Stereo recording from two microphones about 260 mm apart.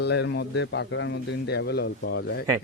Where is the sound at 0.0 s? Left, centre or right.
Left.